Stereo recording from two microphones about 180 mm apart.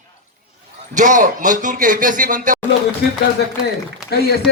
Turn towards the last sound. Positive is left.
turn(degrees=60)  # may be behind; listen again after turning